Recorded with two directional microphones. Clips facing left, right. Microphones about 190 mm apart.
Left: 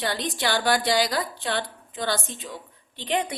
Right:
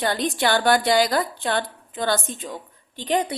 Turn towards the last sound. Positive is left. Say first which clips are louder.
# right 4 dB
turn(degrees=-40)  # may be behind; listen again after turning